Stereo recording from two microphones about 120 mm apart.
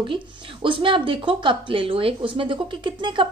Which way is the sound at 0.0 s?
45° right (ahead or behind).